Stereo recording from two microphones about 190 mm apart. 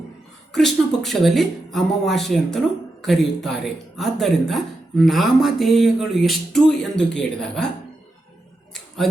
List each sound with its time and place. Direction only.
0.5 s speech: centre (ahead or behind)